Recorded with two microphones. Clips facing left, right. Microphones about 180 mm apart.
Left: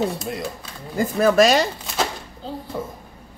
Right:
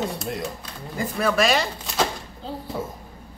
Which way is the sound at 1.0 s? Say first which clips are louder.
Left 6 dB; 40° left (ahead or behind).